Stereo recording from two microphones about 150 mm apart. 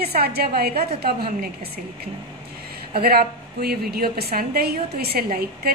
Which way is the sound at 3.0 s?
90° right.